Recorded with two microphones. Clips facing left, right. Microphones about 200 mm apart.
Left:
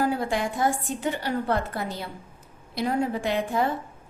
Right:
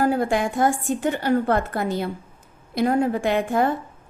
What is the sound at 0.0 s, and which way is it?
A woman's voice, 50° right (ahead or behind).